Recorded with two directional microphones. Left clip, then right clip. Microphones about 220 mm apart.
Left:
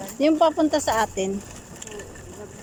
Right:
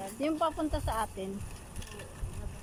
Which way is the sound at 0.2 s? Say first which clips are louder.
Left 13 dB; 30° left (ahead or behind).